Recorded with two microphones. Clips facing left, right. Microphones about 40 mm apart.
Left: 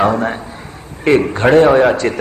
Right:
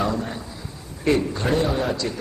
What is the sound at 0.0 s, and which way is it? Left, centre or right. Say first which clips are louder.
A man's voice: left 10 dB; left.